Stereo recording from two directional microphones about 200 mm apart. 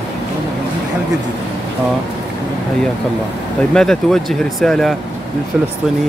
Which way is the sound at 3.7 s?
5° left (ahead or behind).